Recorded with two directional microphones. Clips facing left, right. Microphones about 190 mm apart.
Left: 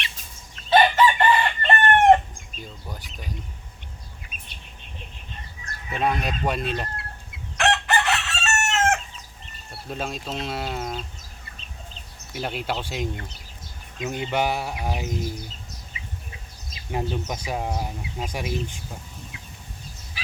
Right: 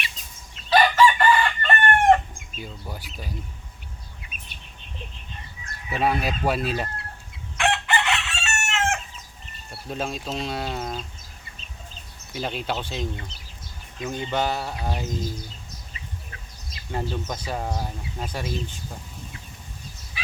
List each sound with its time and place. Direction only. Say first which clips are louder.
0.7 s chicken: even; 25° left (ahead or behind)
2.6 s speech: right 2 dB; 5° right (ahead or behind)
5.9 s speech: right 1 dB; 5° right (ahead or behind)
7.5 s chicken: left 1 dB; 40° left (ahead or behind)
9.9 s speech: right 1 dB; centre (ahead or behind)
12.3 s speech: even; 5° left (ahead or behind)
17.1 s speech: left 1 dB; 15° left (ahead or behind)